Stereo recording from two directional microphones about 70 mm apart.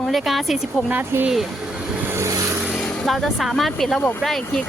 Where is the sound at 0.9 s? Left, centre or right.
Right.